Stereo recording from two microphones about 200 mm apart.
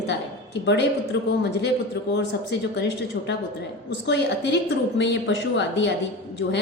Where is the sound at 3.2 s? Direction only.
60° left (ahead or behind).